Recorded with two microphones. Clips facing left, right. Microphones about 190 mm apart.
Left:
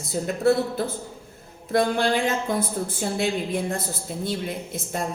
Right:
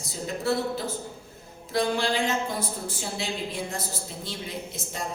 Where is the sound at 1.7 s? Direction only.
55° left (ahead or behind).